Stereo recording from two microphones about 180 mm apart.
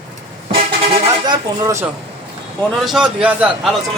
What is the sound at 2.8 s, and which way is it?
Speech, 5° right (ahead or behind).